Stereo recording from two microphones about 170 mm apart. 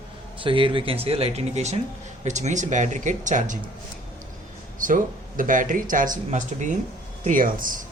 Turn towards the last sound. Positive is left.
turn(degrees=-55)  # may be behind; listen again after turning